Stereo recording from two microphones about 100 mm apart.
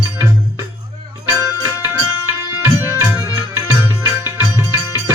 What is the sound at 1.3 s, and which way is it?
Music, 25° right (ahead or behind).